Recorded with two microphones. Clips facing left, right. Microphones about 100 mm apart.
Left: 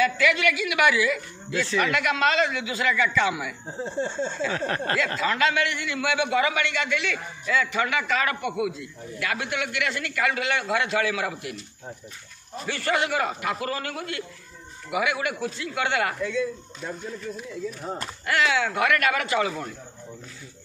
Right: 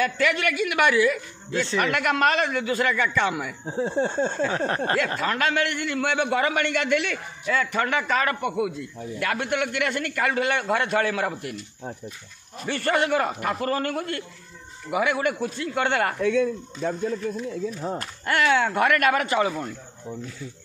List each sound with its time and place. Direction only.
0.0 s a man's voice: 45° right (ahead or behind)
1.5 s a man's voice: 30° right (ahead or behind)
1.9 s a man's voice: 45° right (ahead or behind)
3.7 s speech: 60° right (ahead or behind)
4.5 s speech: 25° right (ahead or behind)
5.2 s a man's voice: 50° right (ahead or behind)
12.6 s a man's voice: 40° right (ahead or behind)
16.2 s speech: 60° right (ahead or behind)
18.2 s a man's voice: 45° right (ahead or behind)